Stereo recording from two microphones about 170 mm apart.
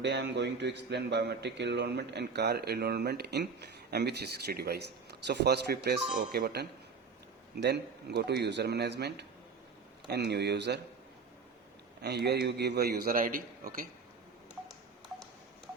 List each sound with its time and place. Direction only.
0.0 s a man's voice: 85° right
12.0 s a man's voice: 75° right (ahead or behind); by 13.8 s 55° right (ahead or behind)